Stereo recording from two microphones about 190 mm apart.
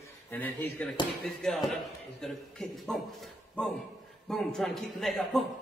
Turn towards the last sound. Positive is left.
turn(degrees=0)  # may be behind; listen again after turning